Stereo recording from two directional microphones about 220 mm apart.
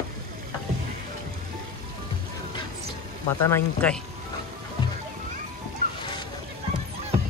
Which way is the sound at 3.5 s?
5° left (ahead or behind).